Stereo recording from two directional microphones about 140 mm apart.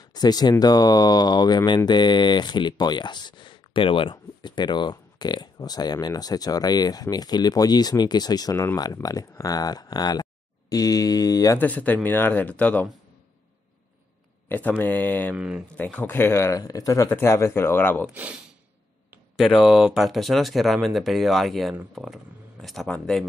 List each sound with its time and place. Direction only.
0.0 s speech: 30° left (ahead or behind)
11.5 s speech: 10° left (ahead or behind)
14.5 s speech: 10° left (ahead or behind)
15.3 s speech: 5° right (ahead or behind)
15.7 s speech: 10° left (ahead or behind)
18.1 s speech: 10° right (ahead or behind)
19.3 s speech: centre (ahead or behind)